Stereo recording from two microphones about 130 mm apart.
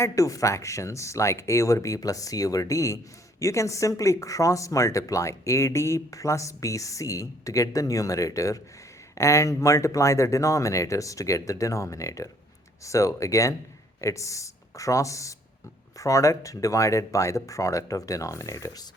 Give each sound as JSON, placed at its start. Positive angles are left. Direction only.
{"t": 0.0, "sound": "speech", "side_deg": 25}